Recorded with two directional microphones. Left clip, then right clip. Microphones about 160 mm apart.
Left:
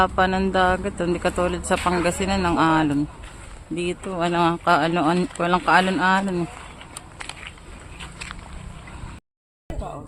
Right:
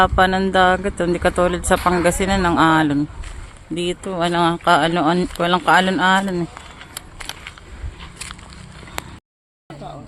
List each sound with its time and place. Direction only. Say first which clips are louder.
0.0 s speech: right 4 dB; 10° right (ahead or behind)